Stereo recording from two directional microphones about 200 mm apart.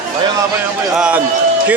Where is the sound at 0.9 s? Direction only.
5° right (ahead or behind).